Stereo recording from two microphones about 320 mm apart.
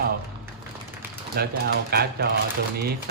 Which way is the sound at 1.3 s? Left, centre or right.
Right.